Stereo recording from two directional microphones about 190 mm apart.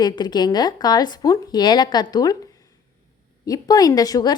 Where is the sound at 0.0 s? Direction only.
20° left (ahead or behind).